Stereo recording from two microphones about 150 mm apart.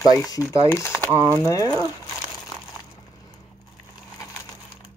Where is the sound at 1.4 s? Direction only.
20° left (ahead or behind).